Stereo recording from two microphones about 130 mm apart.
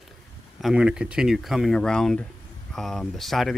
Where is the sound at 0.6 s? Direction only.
5° right (ahead or behind).